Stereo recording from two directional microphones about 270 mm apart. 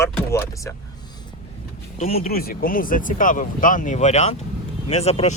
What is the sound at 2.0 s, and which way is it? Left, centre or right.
Speech, left.